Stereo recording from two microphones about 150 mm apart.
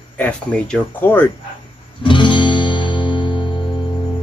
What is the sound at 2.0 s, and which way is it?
Music, 30° left (ahead or behind).